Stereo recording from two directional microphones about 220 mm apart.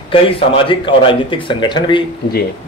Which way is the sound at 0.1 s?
25° left (ahead or behind).